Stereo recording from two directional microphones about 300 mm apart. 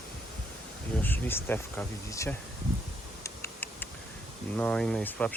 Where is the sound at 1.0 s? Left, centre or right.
Centre.